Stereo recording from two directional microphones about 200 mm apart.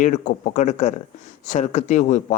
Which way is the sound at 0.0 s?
35° left (ahead or behind).